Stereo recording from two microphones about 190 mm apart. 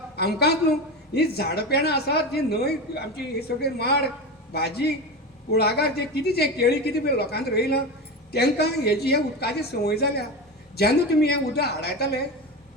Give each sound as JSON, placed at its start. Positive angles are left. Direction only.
{"t": 0.2, "sound": "a woman's voice", "side_deg": 55}